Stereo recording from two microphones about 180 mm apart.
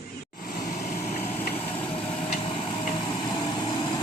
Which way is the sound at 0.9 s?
40° left (ahead or behind).